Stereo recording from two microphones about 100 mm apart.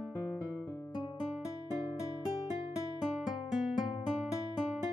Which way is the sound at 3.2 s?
5° right (ahead or behind).